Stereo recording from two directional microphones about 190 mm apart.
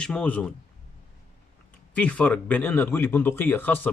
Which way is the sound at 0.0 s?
5° left (ahead or behind).